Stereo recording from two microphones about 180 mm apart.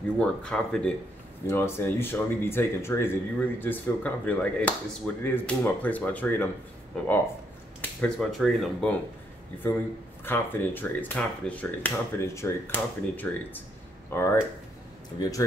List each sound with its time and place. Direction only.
0.2 s speech: 5° left (ahead or behind)
10.2 s speech: 10° left (ahead or behind)